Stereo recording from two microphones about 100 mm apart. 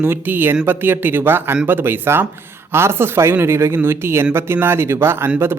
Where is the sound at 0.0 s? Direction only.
20° right (ahead or behind).